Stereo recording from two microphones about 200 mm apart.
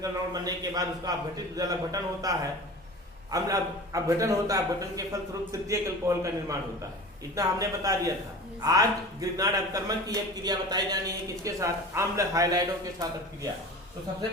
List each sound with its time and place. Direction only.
0.0 s a man's voice: 20° right (ahead or behind)
3.3 s a man's voice: 15° right (ahead or behind)